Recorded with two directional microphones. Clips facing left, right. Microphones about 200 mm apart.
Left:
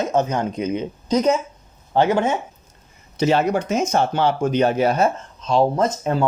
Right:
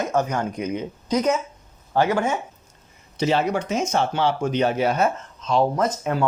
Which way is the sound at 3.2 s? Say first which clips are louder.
Left 3 dB; 45° left (ahead or behind).